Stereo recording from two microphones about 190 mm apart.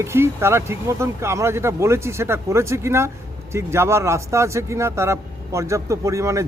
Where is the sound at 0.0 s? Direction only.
15° right (ahead or behind).